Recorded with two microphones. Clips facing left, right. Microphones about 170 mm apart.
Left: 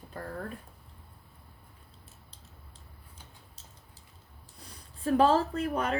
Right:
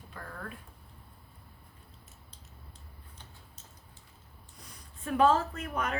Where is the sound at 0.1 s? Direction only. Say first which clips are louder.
Left 6 dB; 40° left (ahead or behind).